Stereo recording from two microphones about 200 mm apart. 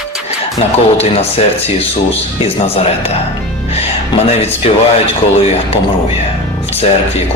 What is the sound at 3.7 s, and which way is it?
Music, 30° left (ahead or behind).